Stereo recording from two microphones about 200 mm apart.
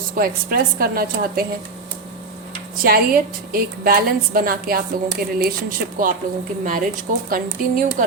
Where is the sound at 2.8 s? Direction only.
50° right (ahead or behind).